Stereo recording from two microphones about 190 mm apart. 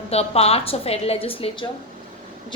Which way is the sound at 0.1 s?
30° left (ahead or behind).